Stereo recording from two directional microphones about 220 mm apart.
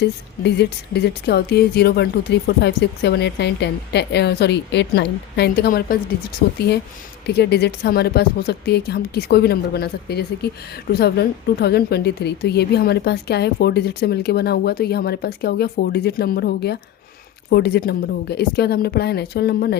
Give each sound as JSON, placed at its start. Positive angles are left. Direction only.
{"t": 0.0, "sound": "speech", "side_deg": 50}